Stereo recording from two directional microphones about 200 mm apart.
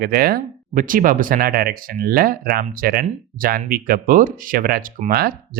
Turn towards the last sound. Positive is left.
turn(degrees=-50)  # may be behind; listen again after turning